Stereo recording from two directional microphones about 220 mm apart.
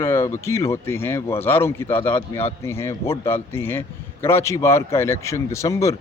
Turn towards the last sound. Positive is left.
turn(degrees=15)  # may be behind; listen again after turning